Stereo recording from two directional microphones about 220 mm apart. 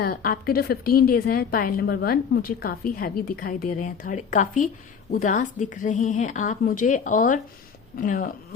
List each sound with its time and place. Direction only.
0.0 s a woman's voice: 40° left (ahead or behind)